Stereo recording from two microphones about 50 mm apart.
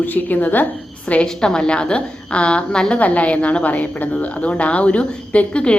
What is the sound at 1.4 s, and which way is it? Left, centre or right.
A woman's voice, centre.